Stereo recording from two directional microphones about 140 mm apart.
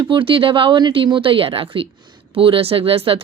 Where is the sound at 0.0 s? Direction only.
35° right (ahead or behind).